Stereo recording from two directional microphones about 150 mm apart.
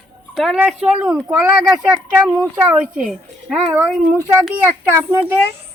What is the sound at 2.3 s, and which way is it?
Speech, 15° right (ahead or behind).